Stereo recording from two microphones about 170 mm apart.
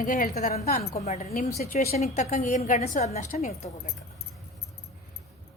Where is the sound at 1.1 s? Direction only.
40° left (ahead or behind).